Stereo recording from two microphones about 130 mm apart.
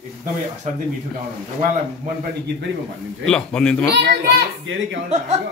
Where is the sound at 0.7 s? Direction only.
70° right (ahead or behind).